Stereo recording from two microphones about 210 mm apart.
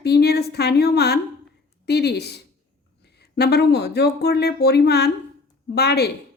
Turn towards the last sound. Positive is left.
turn(degrees=50)  # may be behind; listen again after turning